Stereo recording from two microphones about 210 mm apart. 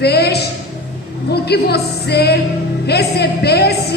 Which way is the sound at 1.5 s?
50° left (ahead or behind).